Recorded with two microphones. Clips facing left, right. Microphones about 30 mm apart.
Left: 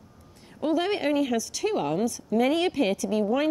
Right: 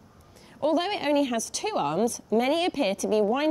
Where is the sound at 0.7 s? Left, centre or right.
Right.